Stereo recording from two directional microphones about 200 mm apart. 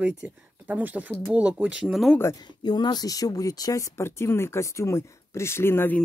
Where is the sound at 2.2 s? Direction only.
20° left (ahead or behind).